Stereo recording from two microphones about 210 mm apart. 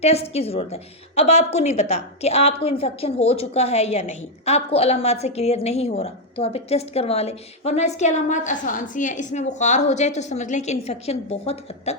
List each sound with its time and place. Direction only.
0.0 s a woman's voice: 30° left (ahead or behind)